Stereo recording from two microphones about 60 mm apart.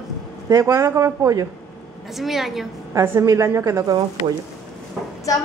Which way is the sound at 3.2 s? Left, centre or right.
Right.